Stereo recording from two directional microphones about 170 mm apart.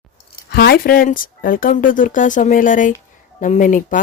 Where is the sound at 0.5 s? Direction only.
70° left (ahead or behind).